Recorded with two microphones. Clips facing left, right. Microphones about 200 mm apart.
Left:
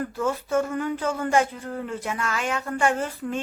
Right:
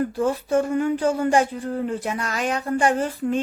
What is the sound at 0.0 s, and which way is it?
Speech, 35° right (ahead or behind).